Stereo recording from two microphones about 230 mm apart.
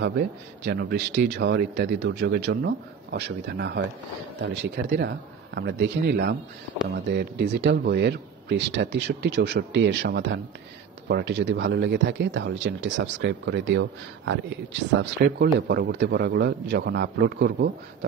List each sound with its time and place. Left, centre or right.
0.7 s speech: right